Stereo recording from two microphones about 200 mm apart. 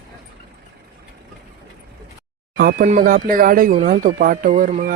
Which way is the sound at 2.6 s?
45° right (ahead or behind).